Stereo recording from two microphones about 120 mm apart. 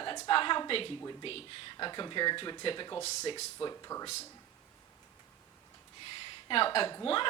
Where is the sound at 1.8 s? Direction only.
40° left (ahead or behind).